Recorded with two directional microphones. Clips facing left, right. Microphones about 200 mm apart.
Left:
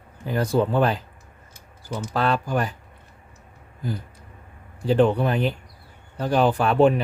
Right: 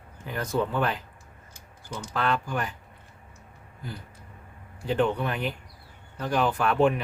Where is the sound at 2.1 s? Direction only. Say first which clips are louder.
Left 5 dB; 35° left (ahead or behind).